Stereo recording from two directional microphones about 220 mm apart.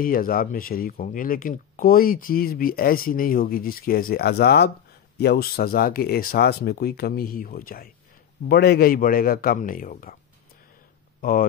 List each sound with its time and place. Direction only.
0.0 s speech: 40° left (ahead or behind)
11.1 s speech: 40° left (ahead or behind)